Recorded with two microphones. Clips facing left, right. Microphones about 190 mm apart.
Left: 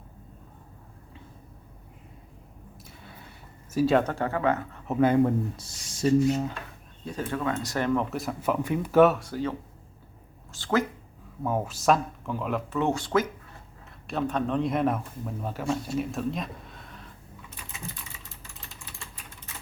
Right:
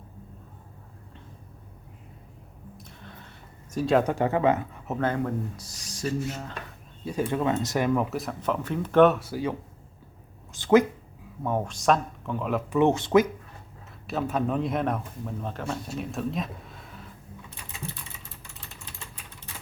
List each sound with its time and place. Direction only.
2.7 s a sound: 5° left (ahead or behind)
4.0 s speech: 15° right (ahead or behind)
4.9 s speech: 15° left (ahead or behind)
7.0 s speech: 10° right (ahead or behind)
11.4 s speech: 5° left (ahead or behind)
12.7 s speech: 20° right (ahead or behind)
14.1 s speech: 5° right (ahead or behind)